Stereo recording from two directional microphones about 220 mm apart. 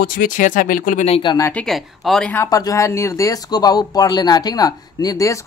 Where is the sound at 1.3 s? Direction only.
10° left (ahead or behind).